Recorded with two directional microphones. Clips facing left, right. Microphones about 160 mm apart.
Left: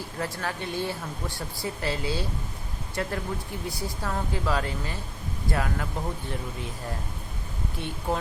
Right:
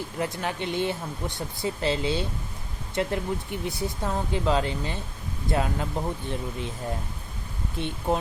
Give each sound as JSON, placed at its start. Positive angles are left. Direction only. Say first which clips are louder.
{"t": 0.2, "sound": "speech", "louder": "right 2 dB", "side_deg": -20}
{"t": 7.8, "sound": "speech", "louder": "right 3 dB", "side_deg": -20}